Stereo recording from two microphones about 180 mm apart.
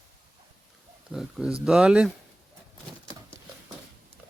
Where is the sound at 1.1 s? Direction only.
5° right (ahead or behind).